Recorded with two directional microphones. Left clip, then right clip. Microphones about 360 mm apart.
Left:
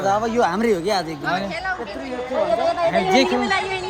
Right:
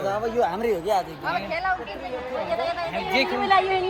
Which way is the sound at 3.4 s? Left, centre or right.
Centre.